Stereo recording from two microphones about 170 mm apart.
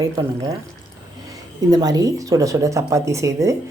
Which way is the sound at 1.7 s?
20° right (ahead or behind).